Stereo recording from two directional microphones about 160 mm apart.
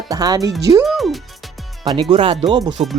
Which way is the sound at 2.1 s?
35° right (ahead or behind).